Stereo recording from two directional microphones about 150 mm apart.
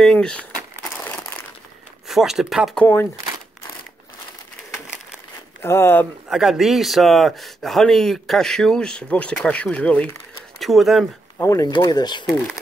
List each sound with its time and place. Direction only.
0.0 s a sound: 5° left (ahead or behind)
2.0 s speech: centre (ahead or behind)
5.6 s speech: 15° left (ahead or behind)
6.3 s speech: centre (ahead or behind)
11.3 s speech: 20° left (ahead or behind)